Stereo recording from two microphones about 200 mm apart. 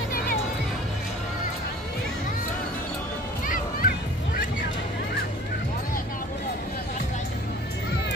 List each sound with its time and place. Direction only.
3.4 s music: 45° left (ahead or behind)